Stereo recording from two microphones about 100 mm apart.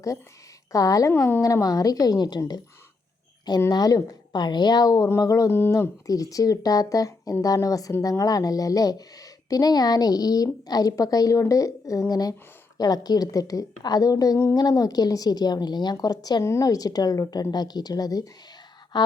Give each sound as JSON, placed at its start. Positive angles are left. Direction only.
{"t": 0.7, "sound": "speech", "side_deg": 35}
{"t": 3.7, "sound": "speech", "side_deg": 40}
{"t": 5.5, "sound": "speech", "side_deg": 25}
{"t": 6.1, "sound": "speech", "side_deg": 35}
{"t": 16.4, "sound": "speech", "side_deg": 30}
{"t": 18.9, "sound": "a sound", "side_deg": 45}